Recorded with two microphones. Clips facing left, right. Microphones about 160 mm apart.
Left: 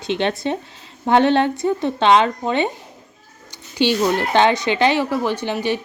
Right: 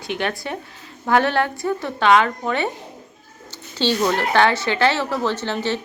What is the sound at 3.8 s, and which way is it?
Speech, 15° left (ahead or behind).